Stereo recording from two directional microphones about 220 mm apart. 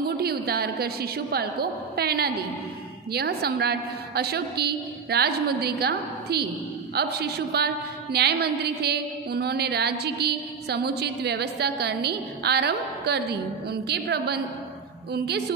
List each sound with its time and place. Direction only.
0.2 s a woman's voice: 45° right (ahead or behind)